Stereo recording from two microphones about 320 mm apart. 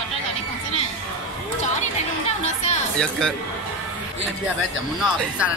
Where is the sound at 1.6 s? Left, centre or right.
Left.